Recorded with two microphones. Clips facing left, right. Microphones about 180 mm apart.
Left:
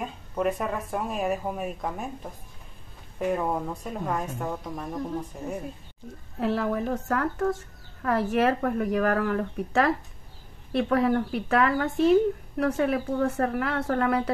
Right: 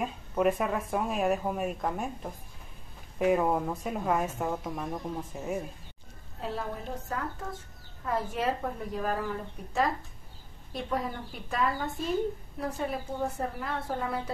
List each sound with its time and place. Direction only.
0.0 s speech: centre (ahead or behind)
3.2 s speech: 5° right (ahead or behind)
6.4 s speech: 75° left (ahead or behind)